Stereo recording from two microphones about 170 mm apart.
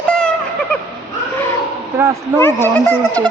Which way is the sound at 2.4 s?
15° left (ahead or behind).